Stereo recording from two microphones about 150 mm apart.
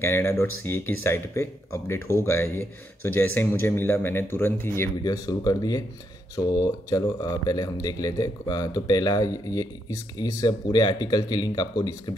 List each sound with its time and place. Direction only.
0.3 s speech: 15° left (ahead or behind)